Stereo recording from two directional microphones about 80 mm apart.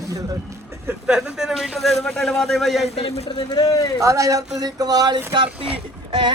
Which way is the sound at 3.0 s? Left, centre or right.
Left.